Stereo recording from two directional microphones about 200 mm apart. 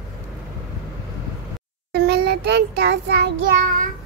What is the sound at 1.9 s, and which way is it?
Child singing, 55° right (ahead or behind).